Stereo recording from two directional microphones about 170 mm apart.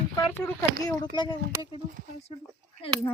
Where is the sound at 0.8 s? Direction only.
20° left (ahead or behind).